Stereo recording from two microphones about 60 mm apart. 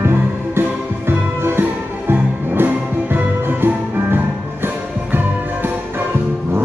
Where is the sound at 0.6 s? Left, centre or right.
Right.